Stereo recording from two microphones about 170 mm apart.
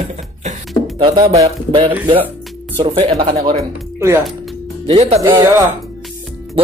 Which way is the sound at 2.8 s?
35° right (ahead or behind).